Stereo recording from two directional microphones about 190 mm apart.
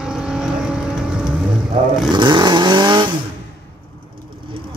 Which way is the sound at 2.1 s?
25° right (ahead or behind).